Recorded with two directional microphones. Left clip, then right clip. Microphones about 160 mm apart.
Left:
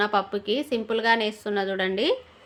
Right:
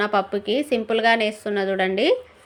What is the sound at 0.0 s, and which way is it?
A woman's voice, 15° right (ahead or behind).